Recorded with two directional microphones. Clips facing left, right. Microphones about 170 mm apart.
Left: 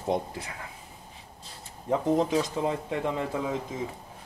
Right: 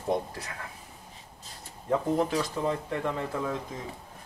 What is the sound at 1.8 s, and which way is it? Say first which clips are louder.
Speech: left 2 dB; 20° left (ahead or behind).